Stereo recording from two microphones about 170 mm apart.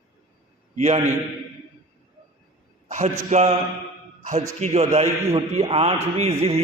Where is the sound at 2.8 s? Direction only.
45° right (ahead or behind).